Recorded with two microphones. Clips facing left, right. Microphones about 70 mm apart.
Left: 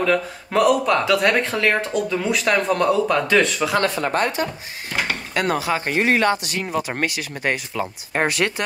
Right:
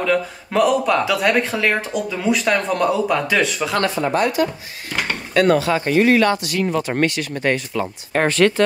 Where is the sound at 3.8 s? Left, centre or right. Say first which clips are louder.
Right 2 dB; left.